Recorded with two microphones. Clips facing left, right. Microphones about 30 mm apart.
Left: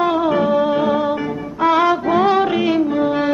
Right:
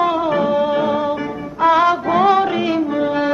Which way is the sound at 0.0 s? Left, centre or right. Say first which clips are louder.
Even; centre.